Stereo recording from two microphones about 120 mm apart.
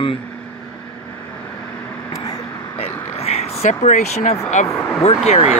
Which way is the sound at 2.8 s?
60° left (ahead or behind).